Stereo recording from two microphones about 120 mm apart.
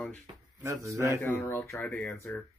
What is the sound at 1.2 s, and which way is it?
Speech, 20° left (ahead or behind).